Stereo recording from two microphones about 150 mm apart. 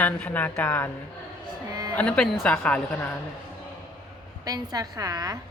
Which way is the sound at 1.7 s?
25° right (ahead or behind).